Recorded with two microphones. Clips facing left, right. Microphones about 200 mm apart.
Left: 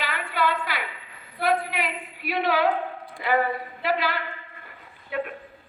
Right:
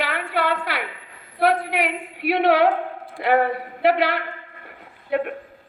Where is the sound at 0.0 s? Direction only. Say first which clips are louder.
Right 3 dB; 70° right (ahead or behind).